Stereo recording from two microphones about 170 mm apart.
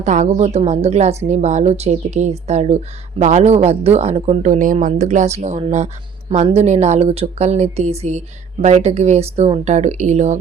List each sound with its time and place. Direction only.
0.0 s speech: 45° right (ahead or behind)